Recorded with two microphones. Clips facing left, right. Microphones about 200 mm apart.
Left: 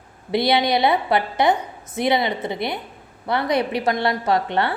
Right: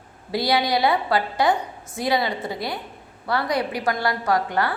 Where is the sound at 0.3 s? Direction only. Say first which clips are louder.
Left 3 dB; 20° left (ahead or behind).